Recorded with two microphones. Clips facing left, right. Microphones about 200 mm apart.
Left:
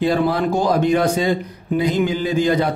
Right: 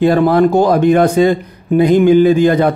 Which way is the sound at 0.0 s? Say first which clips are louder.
Right 8 dB; 55° right (ahead or behind).